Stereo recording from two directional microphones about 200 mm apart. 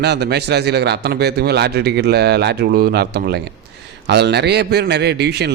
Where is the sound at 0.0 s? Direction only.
55° right (ahead or behind).